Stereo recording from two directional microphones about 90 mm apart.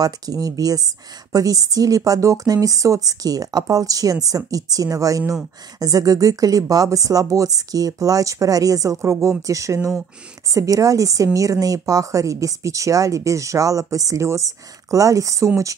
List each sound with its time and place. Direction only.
0.0 s speech: 40° right (ahead or behind)